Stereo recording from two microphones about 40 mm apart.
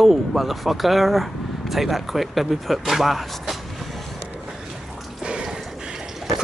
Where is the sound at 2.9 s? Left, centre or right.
Centre.